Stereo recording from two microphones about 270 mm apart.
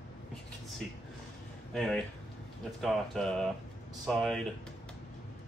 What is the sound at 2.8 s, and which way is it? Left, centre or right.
Speech, centre.